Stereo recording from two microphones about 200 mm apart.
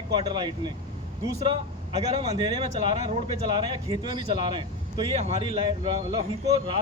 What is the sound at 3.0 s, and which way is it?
Speech, 25° right (ahead or behind).